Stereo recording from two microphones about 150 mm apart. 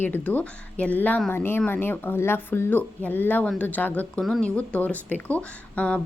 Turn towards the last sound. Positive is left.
turn(degrees=10)  # may be behind; listen again after turning